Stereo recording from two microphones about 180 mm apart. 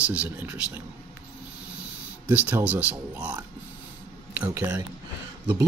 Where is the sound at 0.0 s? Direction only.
5° right (ahead or behind).